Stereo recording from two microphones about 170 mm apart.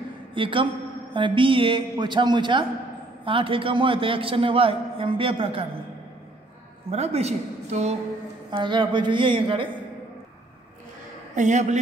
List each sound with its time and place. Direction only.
0.3 s a woman's voice: 30° right (ahead or behind)
6.9 s a man's voice: 40° right (ahead or behind)
8.5 s a man's voice: 25° right (ahead or behind)
11.3 s a man's voice: 45° right (ahead or behind)